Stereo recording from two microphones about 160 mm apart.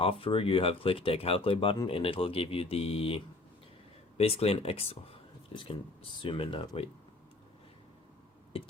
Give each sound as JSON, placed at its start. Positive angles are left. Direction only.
{"t": 0.0, "sound": "speech", "side_deg": 35}